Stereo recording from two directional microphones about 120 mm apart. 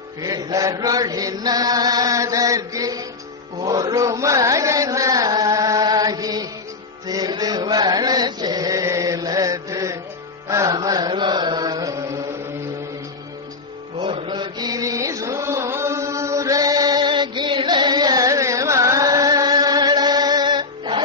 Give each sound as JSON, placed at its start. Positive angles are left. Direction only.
{"t": 0.2, "sound": "chant", "side_deg": -30}
{"t": 13.9, "sound": "mantra", "side_deg": -45}